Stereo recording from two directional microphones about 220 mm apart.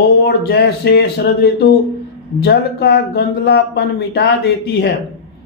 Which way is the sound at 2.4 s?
50° left (ahead or behind).